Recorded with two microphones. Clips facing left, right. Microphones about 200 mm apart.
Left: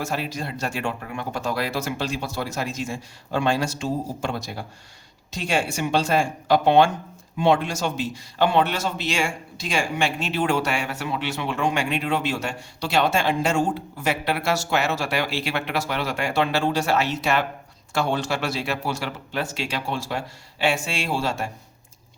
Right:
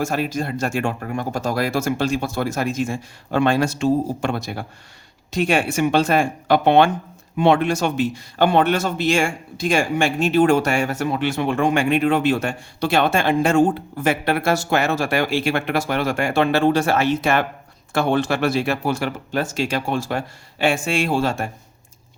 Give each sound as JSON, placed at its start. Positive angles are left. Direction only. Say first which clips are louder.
{"t": 0.0, "sound": "speech", "louder": "right 6 dB", "side_deg": -50}